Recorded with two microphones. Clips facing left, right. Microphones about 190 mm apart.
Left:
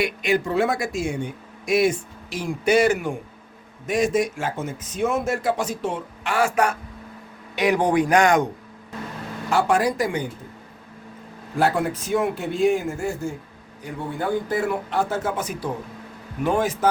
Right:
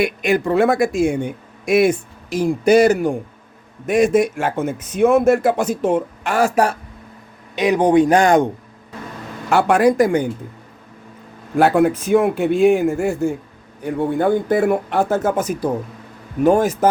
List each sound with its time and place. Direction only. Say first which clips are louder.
0.0 s a man's voice: right 4 dB; 50° right (ahead or behind)
2.3 s a man's voice: right 7 dB; 40° right (ahead or behind)
3.8 s a man's voice: right 6 dB; 55° right (ahead or behind); by 6.7 s 35° right (ahead or behind)
7.5 s a man's voice: right 5 dB; 20° right (ahead or behind)
9.5 s a man's voice: right 6 dB; 65° right (ahead or behind)
11.5 s a man's voice: right 7 dB; 60° right (ahead or behind); by 16.9 s 45° right (ahead or behind)